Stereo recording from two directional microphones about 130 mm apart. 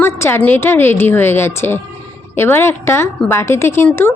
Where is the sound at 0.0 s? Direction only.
20° left (ahead or behind).